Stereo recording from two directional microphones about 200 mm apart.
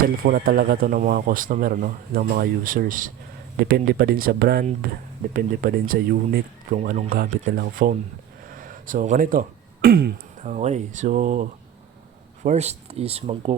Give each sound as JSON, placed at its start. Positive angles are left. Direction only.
{"t": 0.2, "sound": "speech", "side_deg": -45}
{"t": 8.4, "sound": "a sound", "side_deg": -45}
{"t": 10.4, "sound": "speech", "side_deg": -35}